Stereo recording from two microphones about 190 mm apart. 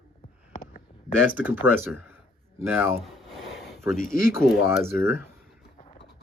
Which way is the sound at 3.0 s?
Centre (ahead or behind).